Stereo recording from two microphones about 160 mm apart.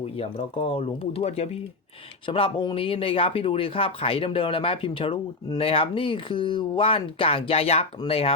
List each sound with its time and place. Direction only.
0.2 s speech: 35° left (ahead or behind)